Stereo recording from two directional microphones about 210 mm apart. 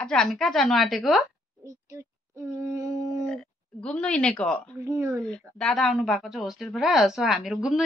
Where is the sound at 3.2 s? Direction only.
5° left (ahead or behind).